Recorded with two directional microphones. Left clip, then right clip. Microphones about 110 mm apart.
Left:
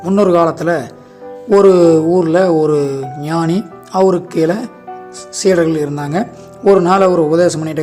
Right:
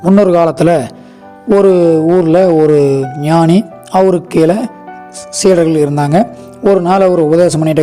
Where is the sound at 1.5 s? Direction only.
30° right (ahead or behind); by 6.2 s 50° right (ahead or behind).